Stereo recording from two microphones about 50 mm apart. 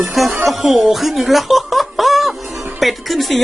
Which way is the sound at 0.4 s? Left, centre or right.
Centre.